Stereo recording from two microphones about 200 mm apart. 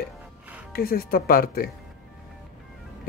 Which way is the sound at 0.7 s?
50° left (ahead or behind).